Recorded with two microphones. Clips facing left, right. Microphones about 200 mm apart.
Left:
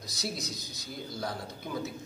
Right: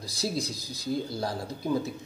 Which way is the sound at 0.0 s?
30° right (ahead or behind).